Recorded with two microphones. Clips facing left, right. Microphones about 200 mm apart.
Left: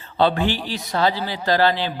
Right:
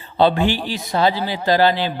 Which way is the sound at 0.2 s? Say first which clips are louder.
Right 3 dB; 15° right (ahead or behind).